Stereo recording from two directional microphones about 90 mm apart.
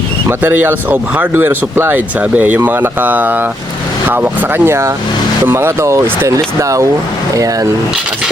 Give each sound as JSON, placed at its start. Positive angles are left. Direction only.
{"t": 0.3, "sound": "speech", "side_deg": -25}